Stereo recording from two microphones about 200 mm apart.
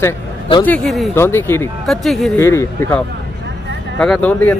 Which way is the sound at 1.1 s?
10° left (ahead or behind).